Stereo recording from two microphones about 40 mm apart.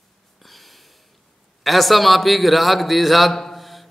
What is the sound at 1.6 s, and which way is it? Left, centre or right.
A man's voice, centre.